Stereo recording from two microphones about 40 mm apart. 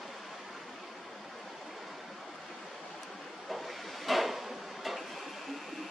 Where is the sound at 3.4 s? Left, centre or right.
Centre.